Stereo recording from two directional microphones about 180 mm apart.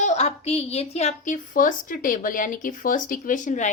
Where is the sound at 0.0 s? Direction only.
40° left (ahead or behind).